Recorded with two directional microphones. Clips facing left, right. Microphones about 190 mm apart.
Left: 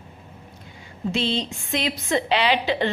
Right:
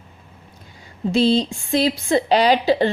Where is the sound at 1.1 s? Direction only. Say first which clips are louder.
Right 8 dB; 35° right (ahead or behind).